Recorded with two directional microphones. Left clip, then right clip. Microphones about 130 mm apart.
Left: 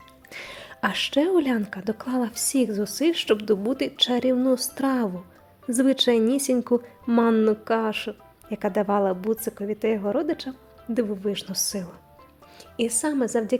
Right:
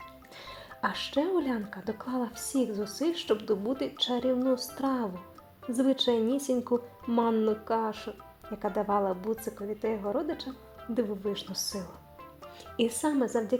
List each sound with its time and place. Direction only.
0.3 s a woman's voice: 30° left (ahead or behind)
12.7 s a woman's voice: centre (ahead or behind)
13.1 s speech: 20° left (ahead or behind)